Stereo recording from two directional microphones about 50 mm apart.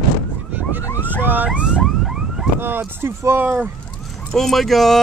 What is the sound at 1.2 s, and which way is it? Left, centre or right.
Vehicle, right.